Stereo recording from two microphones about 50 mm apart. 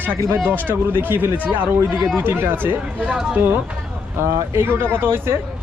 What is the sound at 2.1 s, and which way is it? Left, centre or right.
Speech, right.